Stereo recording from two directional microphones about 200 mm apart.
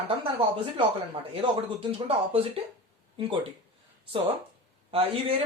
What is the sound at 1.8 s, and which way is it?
Speech, 25° right (ahead or behind).